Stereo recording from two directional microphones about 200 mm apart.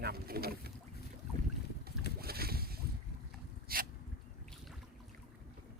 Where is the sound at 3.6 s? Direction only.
50° right (ahead or behind).